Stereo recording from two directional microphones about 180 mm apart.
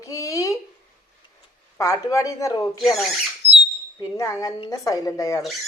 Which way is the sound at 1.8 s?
20° left (ahead or behind).